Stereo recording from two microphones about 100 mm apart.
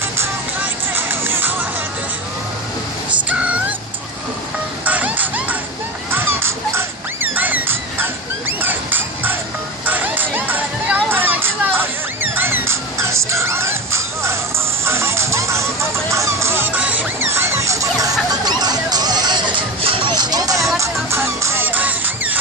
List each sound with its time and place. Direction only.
0.2 s music: 20° right (ahead or behind)
3.2 s dog: 15° right (ahead or behind)
4.9 s music: 15° right (ahead or behind)
6.1 s dog: 25° right (ahead or behind)
7.3 s a sound: 15° right (ahead or behind)
14.8 s music: 25° right (ahead or behind); by 19.6 s 45° right (ahead or behind)
19.8 s music: 70° right (ahead or behind)
20.1 s music: 45° right (ahead or behind); by 22.4 s 15° right (ahead or behind)